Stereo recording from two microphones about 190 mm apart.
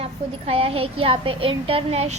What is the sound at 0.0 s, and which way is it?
A woman's voice, 30° right (ahead or behind).